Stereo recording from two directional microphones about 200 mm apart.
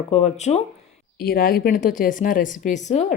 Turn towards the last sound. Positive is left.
turn(degrees=35)  # may be behind; listen again after turning